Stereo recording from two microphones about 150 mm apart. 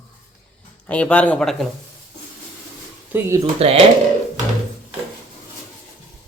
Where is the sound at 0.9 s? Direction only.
10° left (ahead or behind).